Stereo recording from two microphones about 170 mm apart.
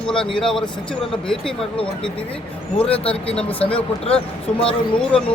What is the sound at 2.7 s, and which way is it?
Speech, 5° left (ahead or behind).